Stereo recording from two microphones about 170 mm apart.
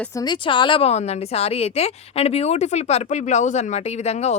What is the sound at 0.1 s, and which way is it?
A woman's voice, 25° left (ahead or behind).